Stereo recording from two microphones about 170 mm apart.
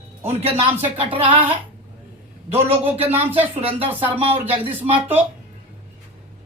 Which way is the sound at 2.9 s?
35° right (ahead or behind).